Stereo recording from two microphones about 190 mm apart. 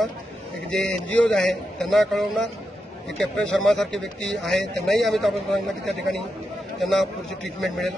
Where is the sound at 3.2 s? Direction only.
5° left (ahead or behind).